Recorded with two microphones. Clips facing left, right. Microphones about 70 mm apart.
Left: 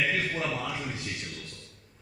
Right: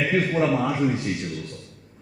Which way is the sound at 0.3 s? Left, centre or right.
Right.